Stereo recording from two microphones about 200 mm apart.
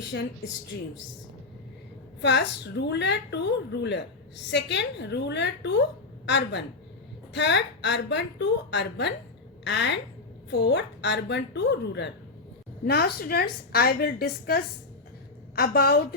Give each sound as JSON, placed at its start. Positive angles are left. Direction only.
{"t": 2.2, "sound": "a woman's voice", "side_deg": 60}
{"t": 12.8, "sound": "a woman's voice", "side_deg": 50}